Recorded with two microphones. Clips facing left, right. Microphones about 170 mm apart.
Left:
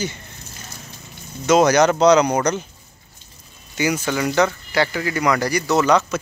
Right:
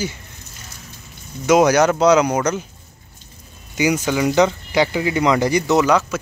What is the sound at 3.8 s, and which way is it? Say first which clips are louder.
Speech: right 3 dB; 15° right (ahead or behind).